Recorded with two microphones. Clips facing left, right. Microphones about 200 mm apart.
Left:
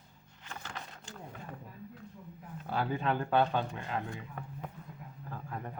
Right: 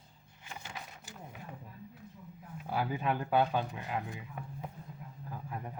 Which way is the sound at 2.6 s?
10° right (ahead or behind).